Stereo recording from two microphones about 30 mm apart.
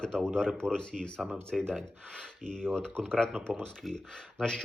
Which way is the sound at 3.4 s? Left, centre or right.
Right.